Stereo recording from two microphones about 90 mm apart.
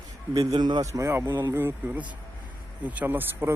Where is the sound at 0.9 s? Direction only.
30° right (ahead or behind).